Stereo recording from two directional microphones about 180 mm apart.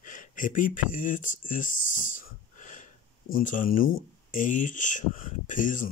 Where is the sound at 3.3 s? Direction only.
45° left (ahead or behind).